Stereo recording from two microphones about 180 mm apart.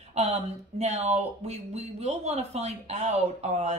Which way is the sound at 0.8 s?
35° right (ahead or behind).